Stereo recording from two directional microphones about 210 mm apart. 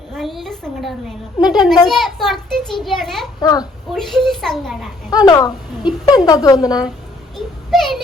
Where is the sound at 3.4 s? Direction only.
20° left (ahead or behind).